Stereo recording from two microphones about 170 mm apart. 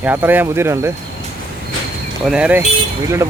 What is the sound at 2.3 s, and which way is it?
Speech, 5° right (ahead or behind).